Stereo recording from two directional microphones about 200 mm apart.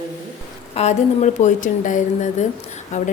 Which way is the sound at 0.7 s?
35° left (ahead or behind).